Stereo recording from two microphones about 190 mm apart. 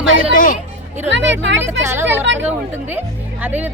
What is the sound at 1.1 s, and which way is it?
Speech, 70° right (ahead or behind).